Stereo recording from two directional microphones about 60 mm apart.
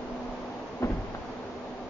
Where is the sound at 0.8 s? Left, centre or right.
Left.